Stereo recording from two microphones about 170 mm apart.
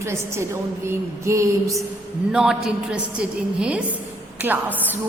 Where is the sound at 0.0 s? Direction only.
15° right (ahead or behind).